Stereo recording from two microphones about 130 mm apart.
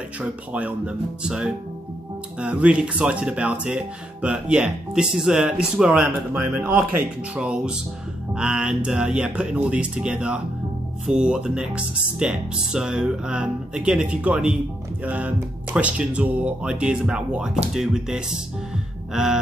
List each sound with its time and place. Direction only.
0.2 s speech: 10° right (ahead or behind)